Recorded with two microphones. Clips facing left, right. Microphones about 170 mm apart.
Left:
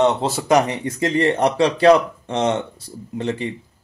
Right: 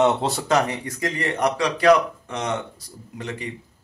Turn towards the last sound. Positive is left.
turn(degrees=30)  # may be behind; listen again after turning